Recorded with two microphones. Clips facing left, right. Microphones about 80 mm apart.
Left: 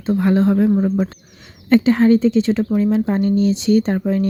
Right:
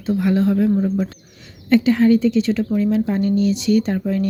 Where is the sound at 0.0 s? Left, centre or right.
Left.